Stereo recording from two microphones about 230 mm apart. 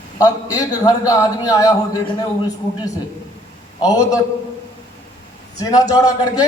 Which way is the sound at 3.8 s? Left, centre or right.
Centre.